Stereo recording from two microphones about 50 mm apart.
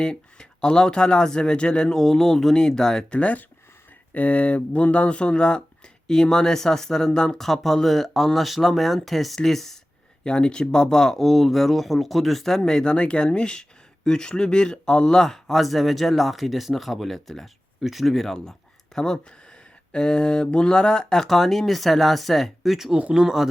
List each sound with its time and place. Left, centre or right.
0.0 s speech: centre
3.1 s speech: left; by 9.7 s centre
10.2 s speech: centre
23.0 s speech: right
23.2 s speech: centre